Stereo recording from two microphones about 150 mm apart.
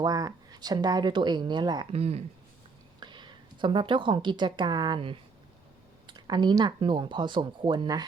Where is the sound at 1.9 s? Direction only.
40° right (ahead or behind).